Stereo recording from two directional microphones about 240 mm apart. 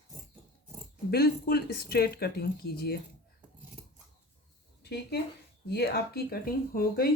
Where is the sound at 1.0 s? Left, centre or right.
Left.